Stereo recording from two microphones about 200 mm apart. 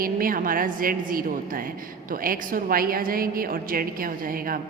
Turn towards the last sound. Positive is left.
turn(degrees=-45)  # may be behind; listen again after turning